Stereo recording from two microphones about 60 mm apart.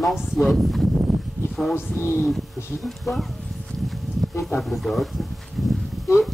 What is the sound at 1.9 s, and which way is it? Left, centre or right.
Speech, left.